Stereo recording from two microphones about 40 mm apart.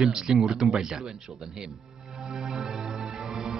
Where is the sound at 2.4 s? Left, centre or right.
Centre.